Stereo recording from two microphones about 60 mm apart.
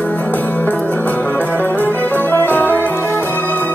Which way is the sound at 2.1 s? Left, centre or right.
Left.